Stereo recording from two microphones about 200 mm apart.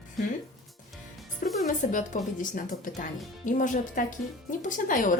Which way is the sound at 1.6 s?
40° left (ahead or behind).